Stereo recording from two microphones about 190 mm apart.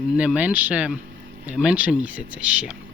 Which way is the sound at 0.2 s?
5° right (ahead or behind).